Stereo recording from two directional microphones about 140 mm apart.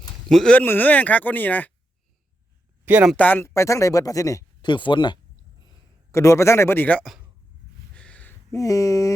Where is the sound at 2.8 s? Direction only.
10° right (ahead or behind).